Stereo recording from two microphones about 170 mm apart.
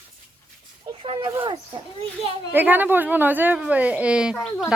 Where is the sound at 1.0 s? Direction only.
30° right (ahead or behind).